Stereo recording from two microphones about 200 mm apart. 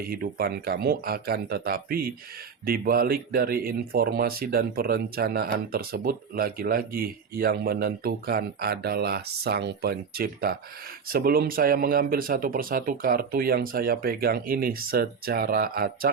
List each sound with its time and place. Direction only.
0.1 s speech: 50° right (ahead or behind)